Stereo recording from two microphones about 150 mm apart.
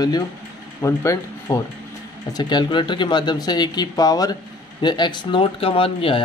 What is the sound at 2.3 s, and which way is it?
Speech, 30° left (ahead or behind).